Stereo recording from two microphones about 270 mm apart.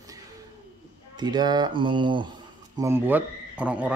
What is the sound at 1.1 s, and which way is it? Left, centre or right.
Speech, centre.